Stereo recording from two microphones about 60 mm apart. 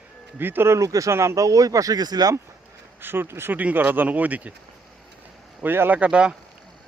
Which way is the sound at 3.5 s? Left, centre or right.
Right.